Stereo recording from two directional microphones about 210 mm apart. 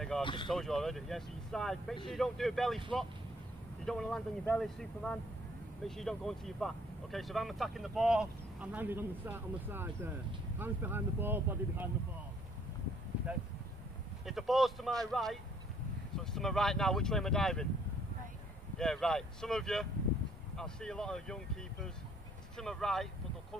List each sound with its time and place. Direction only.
0.2 s speech: 25° left (ahead or behind)
0.5 s speech: centre (ahead or behind)
14.2 s speech: centre (ahead or behind)
16.3 s speech: centre (ahead or behind)
18.8 s speech: 5° left (ahead or behind)
22.6 s speech: centre (ahead or behind)